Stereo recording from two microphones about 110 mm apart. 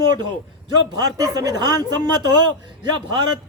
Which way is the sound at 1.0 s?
35° right (ahead or behind).